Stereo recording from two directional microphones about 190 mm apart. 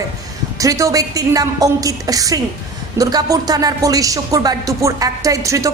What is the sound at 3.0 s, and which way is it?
Music, 20° right (ahead or behind).